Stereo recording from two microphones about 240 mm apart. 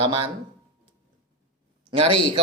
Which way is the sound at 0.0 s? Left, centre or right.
Right.